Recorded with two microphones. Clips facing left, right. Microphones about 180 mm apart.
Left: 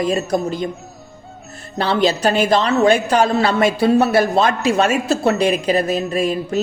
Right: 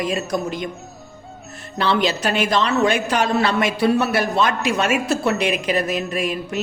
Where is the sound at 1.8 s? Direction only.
35° left (ahead or behind).